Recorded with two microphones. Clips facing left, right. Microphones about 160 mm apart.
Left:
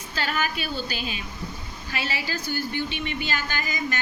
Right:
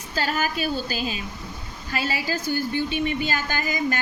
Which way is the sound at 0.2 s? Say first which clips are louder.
Right 3 dB; 40° right (ahead or behind).